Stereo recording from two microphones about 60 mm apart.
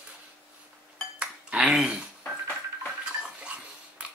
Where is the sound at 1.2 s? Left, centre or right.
Centre.